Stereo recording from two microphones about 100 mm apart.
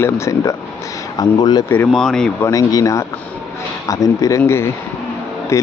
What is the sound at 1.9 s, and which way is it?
Speech, 5° left (ahead or behind).